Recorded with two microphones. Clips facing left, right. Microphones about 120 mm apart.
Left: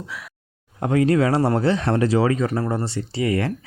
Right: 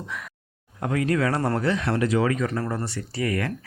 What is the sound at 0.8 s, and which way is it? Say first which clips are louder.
A man's voice: left 5 dB; 30° left (ahead or behind).